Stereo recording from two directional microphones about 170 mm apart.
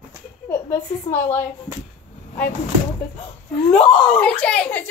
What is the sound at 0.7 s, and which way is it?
Speech, 15° left (ahead or behind).